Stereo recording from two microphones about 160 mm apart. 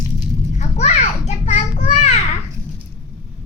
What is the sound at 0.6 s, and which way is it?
A child's voice, 45° left (ahead or behind).